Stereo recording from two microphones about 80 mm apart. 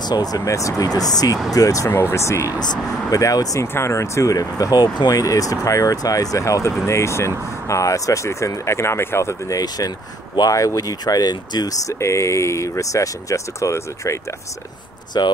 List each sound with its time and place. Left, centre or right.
0.0 s speech: left
1.9 s speech: left
2.6 s speech: left
3.6 s speech: left
5.2 s speech: left
11.8 s speech: left
15.2 s speech: left